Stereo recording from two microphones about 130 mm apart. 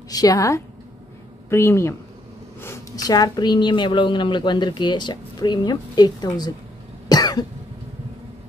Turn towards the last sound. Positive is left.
turn(degrees=30)  # may be behind; listen again after turning